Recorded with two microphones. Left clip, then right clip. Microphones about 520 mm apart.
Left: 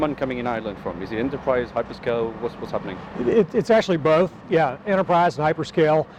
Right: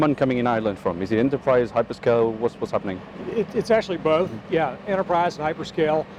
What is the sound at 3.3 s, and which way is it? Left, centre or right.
Speech, left.